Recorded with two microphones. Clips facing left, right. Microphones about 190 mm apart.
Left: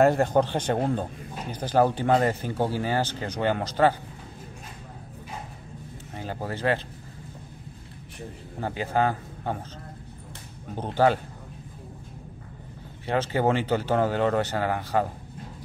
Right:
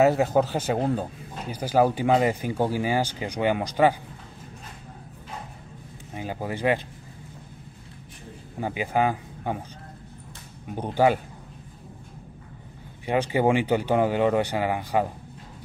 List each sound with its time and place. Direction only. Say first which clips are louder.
0.0 s speech: even; 5° right (ahead or behind)
6.1 s speech: right 2 dB; 15° right (ahead or behind)
8.5 s a man's voice: right 1 dB; 15° right (ahead or behind)
10.7 s speech: right 1 dB; 10° right (ahead or behind)
13.0 s speech: right 2 dB; 15° right (ahead or behind)